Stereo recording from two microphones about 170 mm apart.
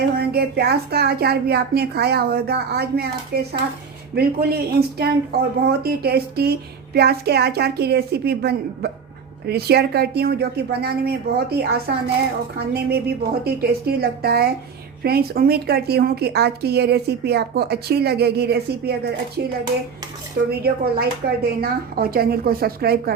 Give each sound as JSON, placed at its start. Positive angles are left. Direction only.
{"t": 0.2, "sound": "a woman's voice", "side_deg": -70}